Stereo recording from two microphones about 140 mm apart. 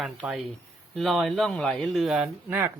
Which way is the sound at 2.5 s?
15° right (ahead or behind).